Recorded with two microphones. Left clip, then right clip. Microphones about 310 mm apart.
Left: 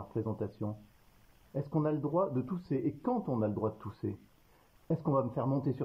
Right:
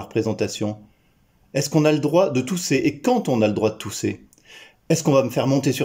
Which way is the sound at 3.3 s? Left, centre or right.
Right.